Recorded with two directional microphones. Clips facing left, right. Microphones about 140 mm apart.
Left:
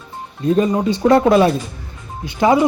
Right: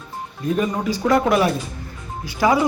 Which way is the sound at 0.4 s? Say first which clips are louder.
Left 6 dB; 30° left (ahead or behind).